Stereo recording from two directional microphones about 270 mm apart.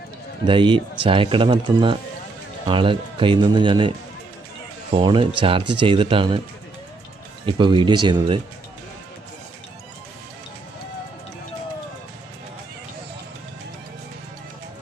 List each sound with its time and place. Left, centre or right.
0.4 s speech: centre
7.4 s speech: centre